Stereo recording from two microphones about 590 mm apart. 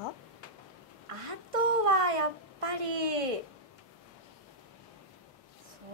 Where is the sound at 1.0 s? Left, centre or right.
Right.